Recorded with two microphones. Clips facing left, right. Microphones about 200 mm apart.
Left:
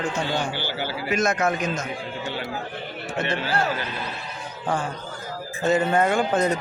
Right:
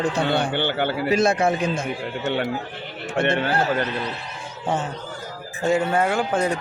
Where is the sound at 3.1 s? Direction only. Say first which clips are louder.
Right 6 dB; 55° right (ahead or behind).